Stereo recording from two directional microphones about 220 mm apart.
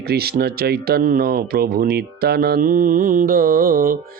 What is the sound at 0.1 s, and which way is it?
Speech, 45° right (ahead or behind).